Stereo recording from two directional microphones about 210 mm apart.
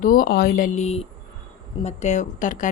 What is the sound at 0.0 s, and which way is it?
Speech, 40° left (ahead or behind).